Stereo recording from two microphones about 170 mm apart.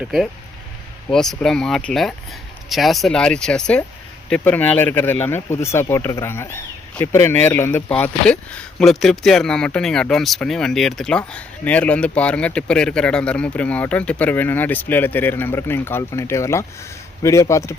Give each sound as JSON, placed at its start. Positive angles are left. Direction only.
{"t": 1.1, "sound": "speech", "side_deg": 5}